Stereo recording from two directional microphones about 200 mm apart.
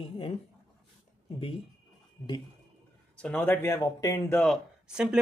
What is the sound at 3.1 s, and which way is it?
Speech, 5° left (ahead or behind).